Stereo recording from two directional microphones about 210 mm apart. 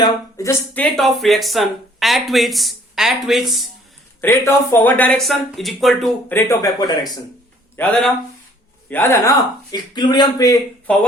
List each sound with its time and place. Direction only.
0.0 s speech: 15° left (ahead or behind)
4.2 s speech: 10° left (ahead or behind)
7.8 s speech: 5° left (ahead or behind)
10.9 s speech: 5° left (ahead or behind)